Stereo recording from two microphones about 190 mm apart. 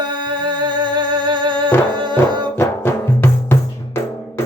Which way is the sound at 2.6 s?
10° left (ahead or behind).